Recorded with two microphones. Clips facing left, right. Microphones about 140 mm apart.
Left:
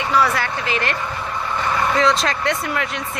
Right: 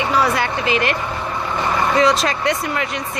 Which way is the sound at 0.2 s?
20° right (ahead or behind).